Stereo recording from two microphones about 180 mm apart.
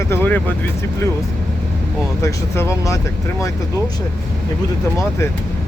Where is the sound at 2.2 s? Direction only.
15° left (ahead or behind).